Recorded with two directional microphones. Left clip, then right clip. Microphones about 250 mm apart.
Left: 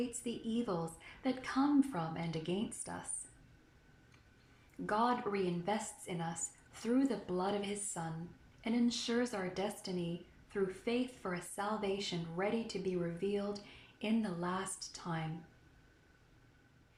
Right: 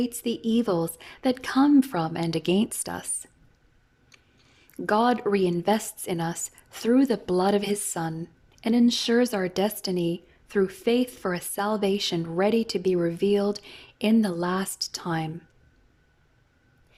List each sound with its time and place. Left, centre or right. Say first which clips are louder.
0.2 s a woman's voice: right 13 dB; right
4.9 s a woman's voice: right 12 dB; right